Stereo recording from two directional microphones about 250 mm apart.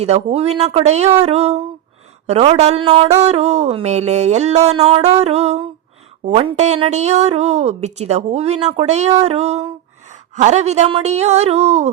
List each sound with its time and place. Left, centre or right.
0.0 s speech: right